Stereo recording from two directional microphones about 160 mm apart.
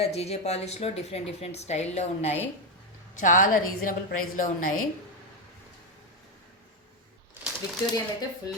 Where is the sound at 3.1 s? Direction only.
55° left (ahead or behind).